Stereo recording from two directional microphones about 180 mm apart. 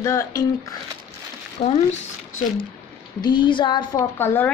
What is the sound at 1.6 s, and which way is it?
Speech, 35° left (ahead or behind).